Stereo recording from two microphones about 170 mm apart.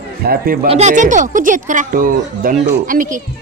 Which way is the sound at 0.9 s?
50° right (ahead or behind).